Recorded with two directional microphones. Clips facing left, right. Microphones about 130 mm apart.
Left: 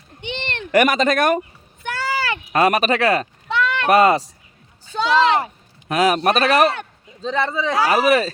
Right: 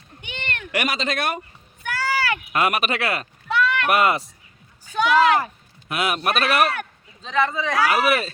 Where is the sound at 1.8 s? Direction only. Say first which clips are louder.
Left 1 dB; 25° left (ahead or behind).